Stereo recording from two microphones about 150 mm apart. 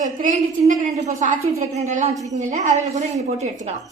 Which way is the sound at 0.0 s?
55° right (ahead or behind).